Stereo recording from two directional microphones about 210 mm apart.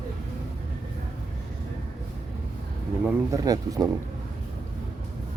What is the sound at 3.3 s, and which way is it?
Speech, 15° right (ahead or behind).